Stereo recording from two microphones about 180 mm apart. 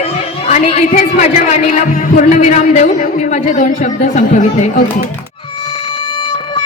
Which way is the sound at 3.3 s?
45° left (ahead or behind).